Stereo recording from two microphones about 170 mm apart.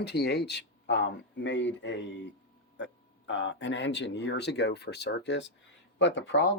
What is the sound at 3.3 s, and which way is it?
Speech, 90° left.